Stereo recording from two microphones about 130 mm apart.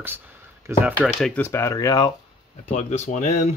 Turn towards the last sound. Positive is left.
turn(degrees=65)  # may be behind; listen again after turning